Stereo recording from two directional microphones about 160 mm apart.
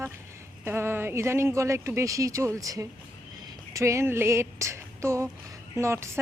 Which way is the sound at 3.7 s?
20° right (ahead or behind).